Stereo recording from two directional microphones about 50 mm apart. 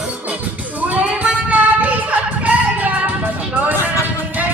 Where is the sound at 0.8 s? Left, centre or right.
Right.